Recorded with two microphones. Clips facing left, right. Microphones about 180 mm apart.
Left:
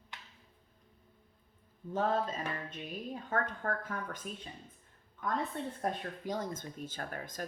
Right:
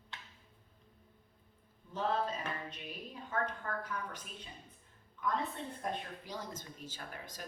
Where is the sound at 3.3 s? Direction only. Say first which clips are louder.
Left 2 dB; 50° left (ahead or behind).